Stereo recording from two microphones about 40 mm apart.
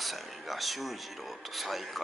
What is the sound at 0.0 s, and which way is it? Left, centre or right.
Speech, centre.